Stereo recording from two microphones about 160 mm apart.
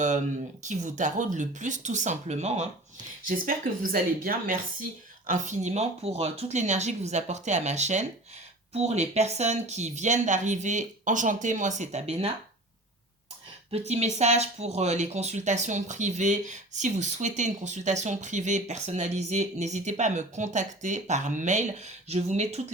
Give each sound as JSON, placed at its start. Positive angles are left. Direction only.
{"t": 0.7, "sound": "speech", "side_deg": -50}
{"t": 3.2, "sound": "speech", "side_deg": -60}
{"t": 13.7, "sound": "speech", "side_deg": -40}